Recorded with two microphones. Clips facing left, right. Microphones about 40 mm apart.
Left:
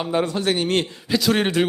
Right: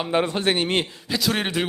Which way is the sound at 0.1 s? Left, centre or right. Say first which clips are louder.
Even; right.